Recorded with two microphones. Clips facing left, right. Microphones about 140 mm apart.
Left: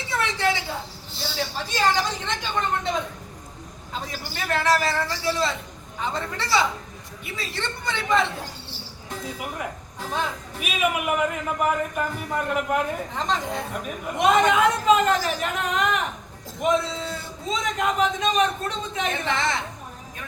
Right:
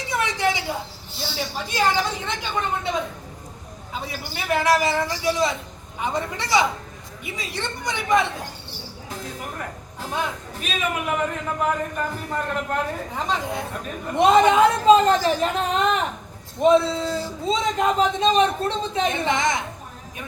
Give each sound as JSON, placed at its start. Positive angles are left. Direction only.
{"t": 0.1, "sound": "a sound", "side_deg": -15}
{"t": 1.7, "sound": "a man's voice", "side_deg": -10}
{"t": 4.0, "sound": "a man's voice", "side_deg": -10}
{"t": 9.0, "sound": "a man's voice", "side_deg": 5}
{"t": 13.1, "sound": "a man's voice", "side_deg": -10}
{"t": 14.2, "sound": "a man's voice", "side_deg": -30}
{"t": 19.3, "sound": "a man's voice", "side_deg": -15}